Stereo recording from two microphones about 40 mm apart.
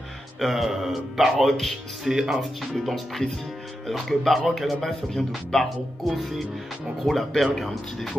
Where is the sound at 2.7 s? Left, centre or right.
Centre.